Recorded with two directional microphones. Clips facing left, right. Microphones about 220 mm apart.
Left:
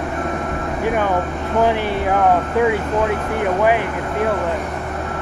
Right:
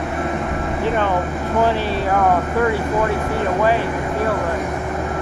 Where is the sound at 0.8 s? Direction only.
10° left (ahead or behind).